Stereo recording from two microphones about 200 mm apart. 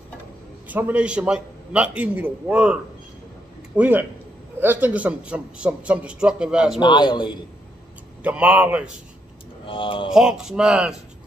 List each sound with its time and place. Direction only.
0.7 s a man's voice: 10° right (ahead or behind)
6.8 s a man's voice: 25° left (ahead or behind)
8.2 s a man's voice: 5° right (ahead or behind)
9.7 s a man's voice: 25° left (ahead or behind)
10.0 s a man's voice: 5° right (ahead or behind)